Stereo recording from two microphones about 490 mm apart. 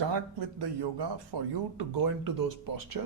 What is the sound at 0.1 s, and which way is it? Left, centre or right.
Speech, right.